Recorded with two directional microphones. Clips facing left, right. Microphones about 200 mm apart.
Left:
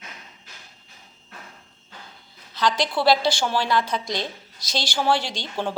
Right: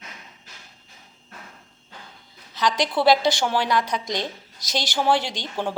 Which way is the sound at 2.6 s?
20° right (ahead or behind).